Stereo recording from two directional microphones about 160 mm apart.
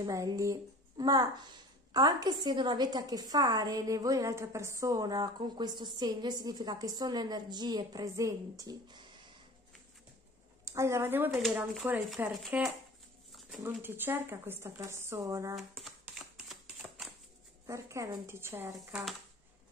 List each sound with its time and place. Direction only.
0.0 s a woman's voice: 20° right (ahead or behind)
10.6 s a woman's voice: 20° right (ahead or behind)
15.5 s typewriter: centre (ahead or behind)
17.6 s speech: 20° right (ahead or behind)